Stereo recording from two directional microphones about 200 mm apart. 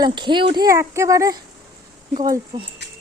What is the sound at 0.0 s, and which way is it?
Speech, 20° right (ahead or behind).